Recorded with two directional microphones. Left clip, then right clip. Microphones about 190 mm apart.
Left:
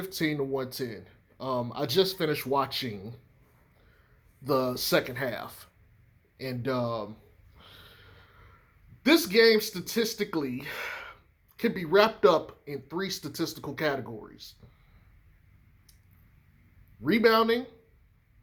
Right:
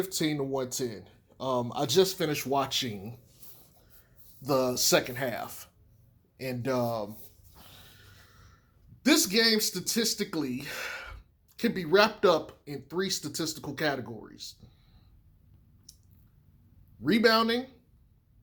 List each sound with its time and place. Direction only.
0.0 s speech: 40° right (ahead or behind)
4.4 s speech: 40° right (ahead or behind)
9.0 s speech: 40° right (ahead or behind)
15.9 s a sound: 40° right (ahead or behind)
17.0 s speech: 40° right (ahead or behind)